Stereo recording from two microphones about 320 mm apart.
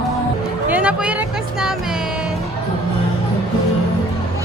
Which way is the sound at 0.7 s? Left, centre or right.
Centre.